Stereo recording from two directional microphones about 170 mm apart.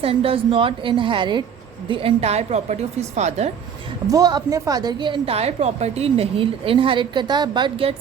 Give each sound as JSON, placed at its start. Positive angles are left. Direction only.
{"t": 0.0, "sound": "a woman's voice", "side_deg": -35}
{"t": 4.0, "sound": "a woman's voice", "side_deg": -20}